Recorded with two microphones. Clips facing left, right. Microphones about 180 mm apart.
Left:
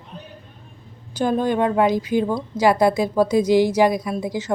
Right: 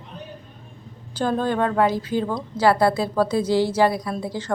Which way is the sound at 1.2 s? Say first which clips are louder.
Left 2 dB; 15° left (ahead or behind).